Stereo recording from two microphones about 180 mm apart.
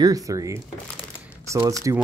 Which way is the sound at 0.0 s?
20° right (ahead or behind).